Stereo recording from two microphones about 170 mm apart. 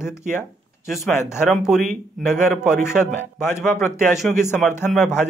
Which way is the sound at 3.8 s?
Centre (ahead or behind).